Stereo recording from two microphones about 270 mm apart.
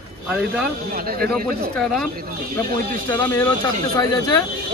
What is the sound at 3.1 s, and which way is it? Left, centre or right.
Speech, centre.